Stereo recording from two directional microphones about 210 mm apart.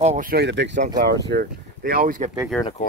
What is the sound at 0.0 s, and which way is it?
Speech, 35° right (ahead or behind).